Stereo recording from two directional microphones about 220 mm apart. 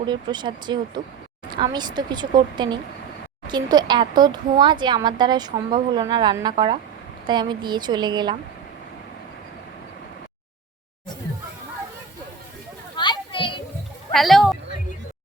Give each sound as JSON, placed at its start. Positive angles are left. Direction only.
{"t": 0.0, "sound": "speech", "side_deg": -20}
{"t": 13.0, "sound": "children playing", "side_deg": 20}
{"t": 14.1, "sound": "speech", "side_deg": 0}